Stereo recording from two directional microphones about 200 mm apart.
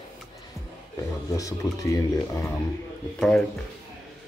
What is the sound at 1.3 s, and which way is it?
Speech, 15° left (ahead or behind).